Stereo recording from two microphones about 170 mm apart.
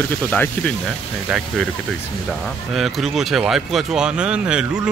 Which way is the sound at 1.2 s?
5° right (ahead or behind).